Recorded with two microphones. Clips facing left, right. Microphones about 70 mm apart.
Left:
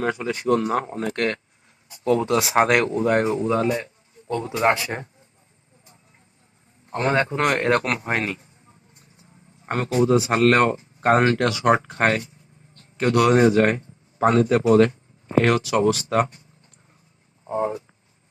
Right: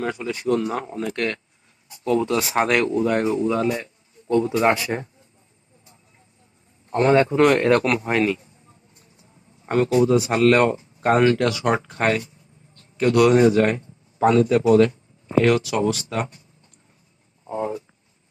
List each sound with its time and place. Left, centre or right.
0.0 s a man's voice: left
2.6 s a man's voice: left
7.0 s a man's voice: left
9.6 s a man's voice: left
17.5 s speech: left